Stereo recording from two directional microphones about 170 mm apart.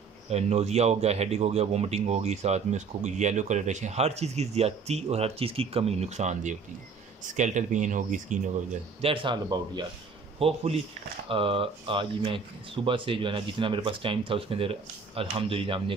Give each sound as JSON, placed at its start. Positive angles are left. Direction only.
{"t": 0.3, "sound": "speech", "side_deg": -40}
{"t": 9.0, "sound": "speech", "side_deg": -30}
{"t": 10.4, "sound": "speech", "side_deg": -40}